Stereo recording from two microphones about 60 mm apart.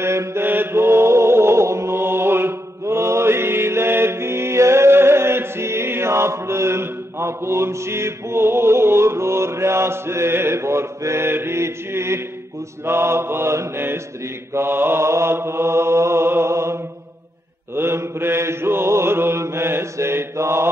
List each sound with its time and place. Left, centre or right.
0.0 s mantra: right
0.5 s mantra: right